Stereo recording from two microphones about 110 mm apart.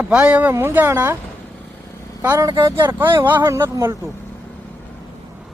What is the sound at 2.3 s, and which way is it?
Speech, 40° right (ahead or behind).